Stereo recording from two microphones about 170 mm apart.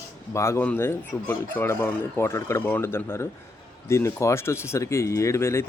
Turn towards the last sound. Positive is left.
turn(degrees=15)  # may be behind; listen again after turning